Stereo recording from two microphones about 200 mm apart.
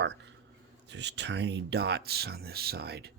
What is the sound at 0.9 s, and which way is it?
Speech, 60° right (ahead or behind).